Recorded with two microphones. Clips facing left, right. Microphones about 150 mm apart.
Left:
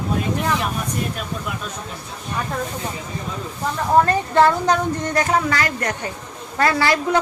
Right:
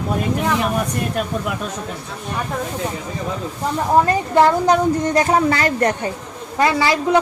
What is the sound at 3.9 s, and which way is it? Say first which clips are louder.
Speech: right 1 dB; 15° right (ahead or behind).